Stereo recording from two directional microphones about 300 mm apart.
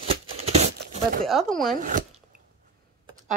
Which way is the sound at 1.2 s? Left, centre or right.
Centre.